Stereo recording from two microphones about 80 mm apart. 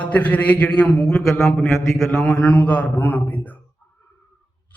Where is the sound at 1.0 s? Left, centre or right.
Centre.